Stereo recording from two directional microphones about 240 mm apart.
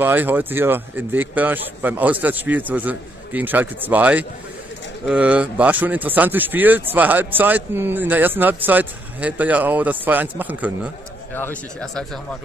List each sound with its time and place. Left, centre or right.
0.0 s a man's voice: centre
11.3 s speech: centre